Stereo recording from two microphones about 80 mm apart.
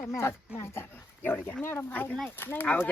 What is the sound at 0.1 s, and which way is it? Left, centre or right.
Speech, left.